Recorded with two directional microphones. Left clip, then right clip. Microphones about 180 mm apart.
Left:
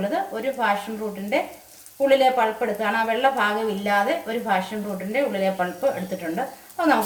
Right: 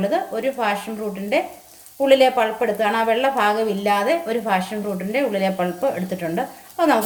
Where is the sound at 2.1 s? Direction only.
60° right (ahead or behind).